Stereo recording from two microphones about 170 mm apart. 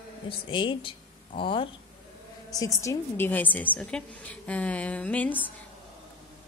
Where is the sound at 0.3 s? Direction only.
30° left (ahead or behind).